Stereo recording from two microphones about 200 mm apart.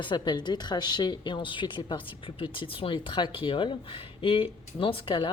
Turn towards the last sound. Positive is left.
turn(degrees=25)  # may be behind; listen again after turning